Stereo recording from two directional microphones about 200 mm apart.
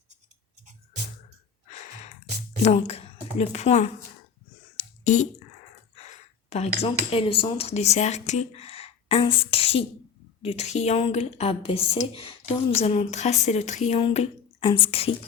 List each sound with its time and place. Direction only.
2.6 s a woman's voice: 30° left (ahead or behind)
4.8 s a sound: 40° left (ahead or behind)
7.1 s speech: 30° left (ahead or behind)